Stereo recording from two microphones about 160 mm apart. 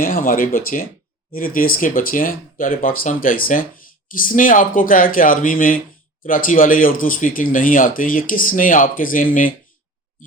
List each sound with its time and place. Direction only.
0.0 s speech: 60° left (ahead or behind)